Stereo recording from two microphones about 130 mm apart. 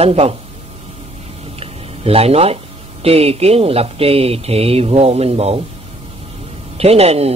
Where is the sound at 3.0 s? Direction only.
50° right (ahead or behind).